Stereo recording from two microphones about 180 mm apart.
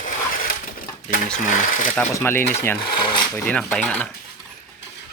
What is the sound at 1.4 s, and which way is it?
Speech, 50° left (ahead or behind).